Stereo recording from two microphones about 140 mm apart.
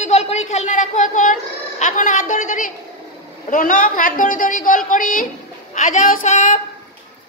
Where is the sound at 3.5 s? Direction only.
65° left (ahead or behind).